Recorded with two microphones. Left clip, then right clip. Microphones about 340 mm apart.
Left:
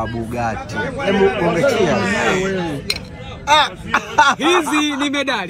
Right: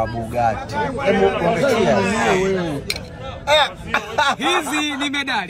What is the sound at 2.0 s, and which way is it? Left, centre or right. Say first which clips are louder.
Speech: even; centre.